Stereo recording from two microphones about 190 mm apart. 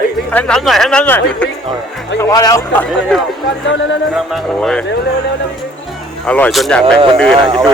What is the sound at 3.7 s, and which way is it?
Speech, 70° left (ahead or behind).